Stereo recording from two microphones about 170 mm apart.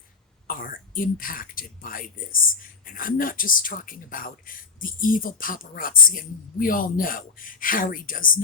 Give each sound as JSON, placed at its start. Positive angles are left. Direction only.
{"t": 0.4, "sound": "speech", "side_deg": 55}